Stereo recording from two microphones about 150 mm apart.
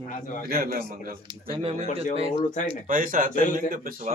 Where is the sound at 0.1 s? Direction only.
60° left (ahead or behind).